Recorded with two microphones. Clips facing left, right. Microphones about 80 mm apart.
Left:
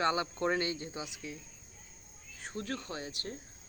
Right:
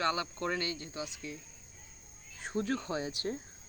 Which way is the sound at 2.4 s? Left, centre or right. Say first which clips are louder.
Right 5 dB; right.